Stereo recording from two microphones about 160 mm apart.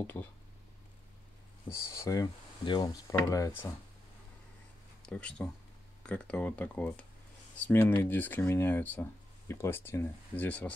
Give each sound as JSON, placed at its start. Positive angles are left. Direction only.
{"t": 0.0, "sound": "speech", "side_deg": 10}
{"t": 1.7, "sound": "speech", "side_deg": 20}
{"t": 5.0, "sound": "speech", "side_deg": 10}